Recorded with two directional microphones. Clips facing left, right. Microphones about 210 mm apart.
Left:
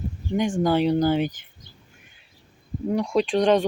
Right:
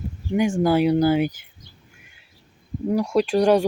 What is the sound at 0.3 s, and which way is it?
Speech, 10° right (ahead or behind).